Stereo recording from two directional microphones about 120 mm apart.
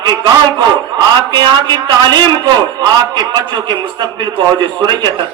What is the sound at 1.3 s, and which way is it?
A man's voice, 40° right (ahead or behind).